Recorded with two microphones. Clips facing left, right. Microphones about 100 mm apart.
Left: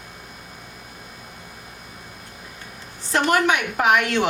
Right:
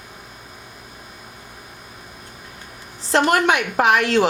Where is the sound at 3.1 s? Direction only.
35° right (ahead or behind).